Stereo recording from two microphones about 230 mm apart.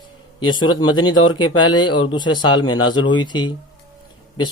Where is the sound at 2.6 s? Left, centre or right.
Left.